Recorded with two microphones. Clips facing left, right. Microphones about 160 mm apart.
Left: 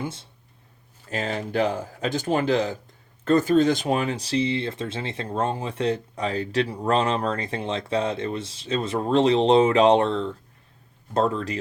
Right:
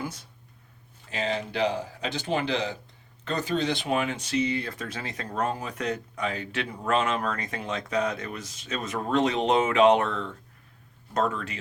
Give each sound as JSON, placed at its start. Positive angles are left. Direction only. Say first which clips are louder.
{"t": 0.0, "sound": "speech", "louder": "left 3 dB", "side_deg": 25}
{"t": 1.1, "sound": "speech", "louder": "left 3 dB", "side_deg": 45}